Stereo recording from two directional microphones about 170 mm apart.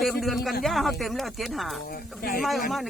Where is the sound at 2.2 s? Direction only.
60° left (ahead or behind).